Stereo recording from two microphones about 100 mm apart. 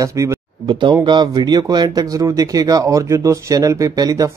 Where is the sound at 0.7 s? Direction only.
50° right (ahead or behind).